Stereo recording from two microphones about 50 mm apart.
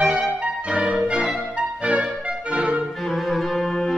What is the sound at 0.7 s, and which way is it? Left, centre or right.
Music, right.